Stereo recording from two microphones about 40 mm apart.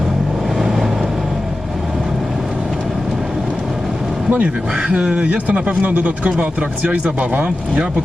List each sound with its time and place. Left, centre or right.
0.6 s vehicle: centre
4.3 s speech: right
4.8 s speech: right
6.4 s speech: right